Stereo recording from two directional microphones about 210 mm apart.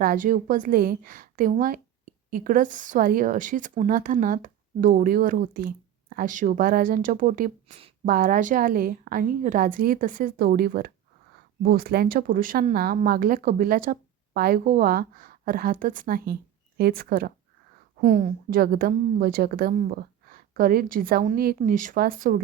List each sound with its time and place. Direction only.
0.0 s a woman's voice: 40° right (ahead or behind)